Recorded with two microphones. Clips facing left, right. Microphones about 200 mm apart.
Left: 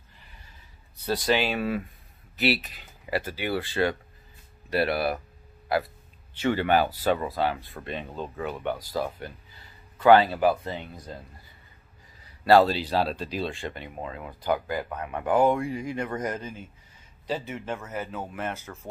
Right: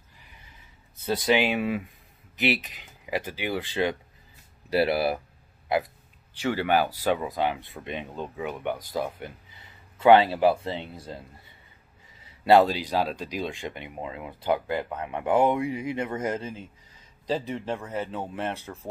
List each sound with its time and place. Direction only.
1.0 s speech: 20° right (ahead or behind)
6.3 s a man's voice: 10° right (ahead or behind); by 18.7 s 30° right (ahead or behind)